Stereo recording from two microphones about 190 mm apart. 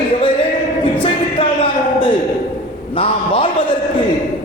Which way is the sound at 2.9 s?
30° left (ahead or behind).